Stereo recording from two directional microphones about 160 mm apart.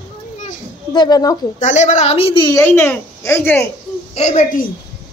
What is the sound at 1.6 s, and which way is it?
Speech, 45° left (ahead or behind).